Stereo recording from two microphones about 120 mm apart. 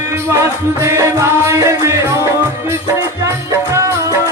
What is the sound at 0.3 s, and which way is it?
Music, 25° right (ahead or behind).